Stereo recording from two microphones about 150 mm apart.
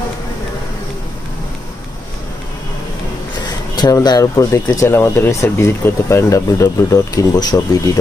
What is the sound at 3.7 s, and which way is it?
Speech, 25° left (ahead or behind).